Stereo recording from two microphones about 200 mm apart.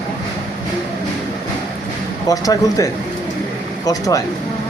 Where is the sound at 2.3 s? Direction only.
15° left (ahead or behind).